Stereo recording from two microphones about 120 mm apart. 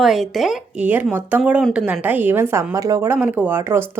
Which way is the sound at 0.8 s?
15° right (ahead or behind).